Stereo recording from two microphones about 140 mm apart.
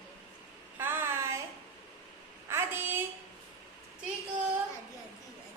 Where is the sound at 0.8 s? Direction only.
15° right (ahead or behind).